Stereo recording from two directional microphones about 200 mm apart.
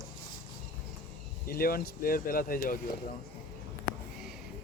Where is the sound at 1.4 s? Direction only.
45° left (ahead or behind).